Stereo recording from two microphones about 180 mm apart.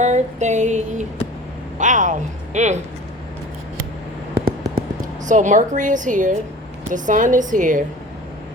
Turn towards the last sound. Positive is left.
turn(degrees=-45)  # may be behind; listen again after turning